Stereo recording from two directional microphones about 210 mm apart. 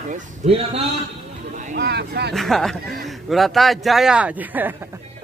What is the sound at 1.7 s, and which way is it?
Speech, 50° right (ahead or behind).